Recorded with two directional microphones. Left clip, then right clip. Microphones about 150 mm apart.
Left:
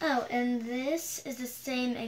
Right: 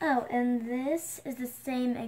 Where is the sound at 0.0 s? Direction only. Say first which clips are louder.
Right 1 dB; 20° left (ahead or behind).